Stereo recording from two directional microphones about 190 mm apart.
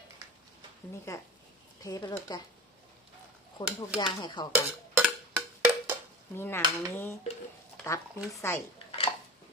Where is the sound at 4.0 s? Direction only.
25° left (ahead or behind).